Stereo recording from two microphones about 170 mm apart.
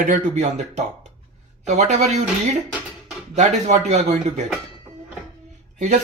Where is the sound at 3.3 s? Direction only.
45° right (ahead or behind).